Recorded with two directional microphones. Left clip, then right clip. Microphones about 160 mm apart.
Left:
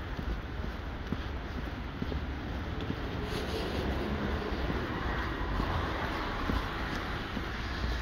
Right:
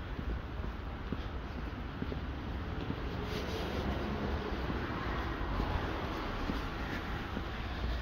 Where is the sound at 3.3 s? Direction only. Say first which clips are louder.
Left 3 dB; 45° right (ahead or behind).